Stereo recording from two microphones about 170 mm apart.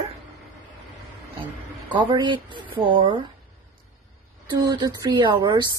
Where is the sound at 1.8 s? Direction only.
25° right (ahead or behind).